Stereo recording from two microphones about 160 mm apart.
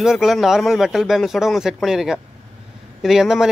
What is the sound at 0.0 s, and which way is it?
Speech, centre (ahead or behind).